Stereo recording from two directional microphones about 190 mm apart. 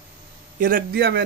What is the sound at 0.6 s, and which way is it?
Speech, 50° right (ahead or behind).